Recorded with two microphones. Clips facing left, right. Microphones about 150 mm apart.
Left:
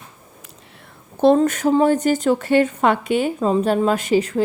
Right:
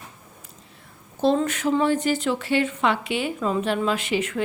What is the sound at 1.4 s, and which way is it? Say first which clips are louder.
A woman's voice: left 6 dB; 45° left (ahead or behind).